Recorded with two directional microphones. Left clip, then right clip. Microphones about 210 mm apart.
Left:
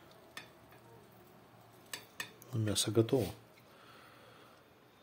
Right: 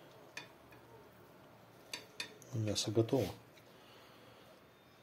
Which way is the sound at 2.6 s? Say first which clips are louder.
Left 3 dB; 20° left (ahead or behind).